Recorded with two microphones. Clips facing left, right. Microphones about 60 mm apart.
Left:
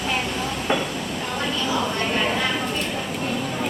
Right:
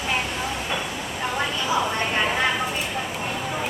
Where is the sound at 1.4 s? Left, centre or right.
Centre.